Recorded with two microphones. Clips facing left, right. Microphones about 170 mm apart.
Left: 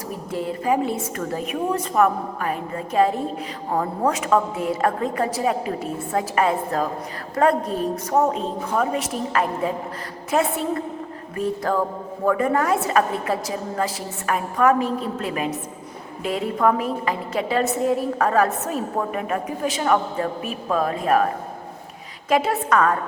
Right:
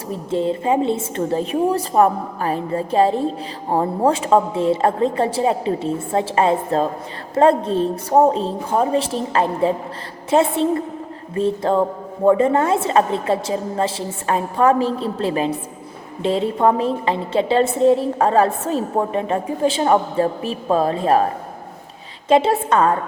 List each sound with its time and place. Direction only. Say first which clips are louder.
0.1 s a woman's voice: right 8 dB; 25° right (ahead or behind)
22.3 s a woman's voice: right 4 dB; 25° right (ahead or behind)